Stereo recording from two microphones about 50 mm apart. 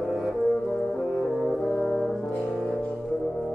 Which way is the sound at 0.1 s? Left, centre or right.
Centre.